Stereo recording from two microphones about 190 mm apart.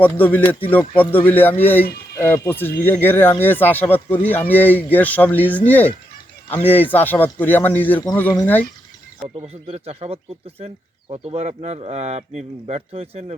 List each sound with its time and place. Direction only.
0.0 s speech: 10° left (ahead or behind)
9.5 s speech: 30° right (ahead or behind)